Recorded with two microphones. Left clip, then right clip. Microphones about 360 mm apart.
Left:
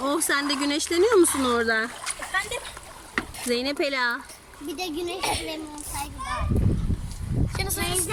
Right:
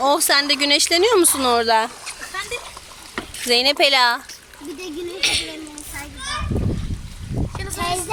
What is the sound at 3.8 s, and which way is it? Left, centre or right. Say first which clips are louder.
Speech: right 10 dB; centre.